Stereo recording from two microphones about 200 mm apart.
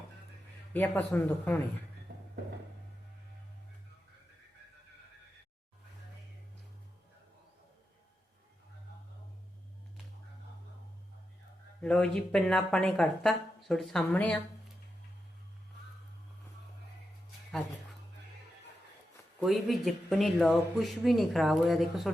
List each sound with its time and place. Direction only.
0.7 s speech: 10° left (ahead or behind)
2.1 s a sound: 60° right (ahead or behind)
11.8 s speech: 5° left (ahead or behind)
19.4 s speech: centre (ahead or behind)